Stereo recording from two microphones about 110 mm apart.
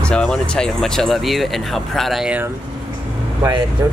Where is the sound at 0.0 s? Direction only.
5° left (ahead or behind).